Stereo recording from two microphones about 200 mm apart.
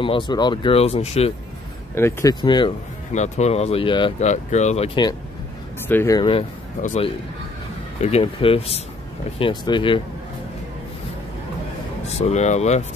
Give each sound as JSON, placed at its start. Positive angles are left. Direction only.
{"t": 0.0, "sound": "speech", "side_deg": 25}
{"t": 2.0, "sound": "speech", "side_deg": 10}
{"t": 2.4, "sound": "speech", "side_deg": 25}
{"t": 3.1, "sound": "speech", "side_deg": 35}
{"t": 4.3, "sound": "speech", "side_deg": 35}
{"t": 5.9, "sound": "speech", "side_deg": 15}
{"t": 6.8, "sound": "speech", "side_deg": 35}
{"t": 12.1, "sound": "speech", "side_deg": 30}